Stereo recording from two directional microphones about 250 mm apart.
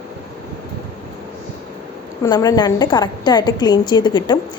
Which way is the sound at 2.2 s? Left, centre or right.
Centre.